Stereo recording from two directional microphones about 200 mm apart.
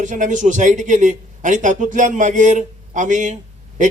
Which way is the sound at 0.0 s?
40° right (ahead or behind).